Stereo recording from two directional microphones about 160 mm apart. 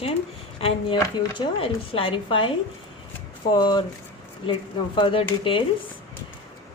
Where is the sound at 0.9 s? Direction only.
20° left (ahead or behind).